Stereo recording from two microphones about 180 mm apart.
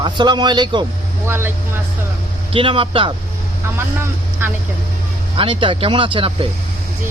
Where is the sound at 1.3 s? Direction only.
15° right (ahead or behind).